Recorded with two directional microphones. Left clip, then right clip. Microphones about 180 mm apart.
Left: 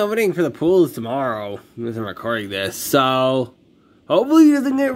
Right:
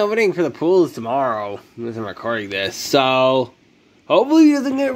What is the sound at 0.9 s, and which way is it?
Speech, 60° left (ahead or behind).